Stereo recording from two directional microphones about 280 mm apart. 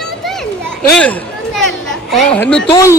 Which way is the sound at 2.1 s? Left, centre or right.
Centre.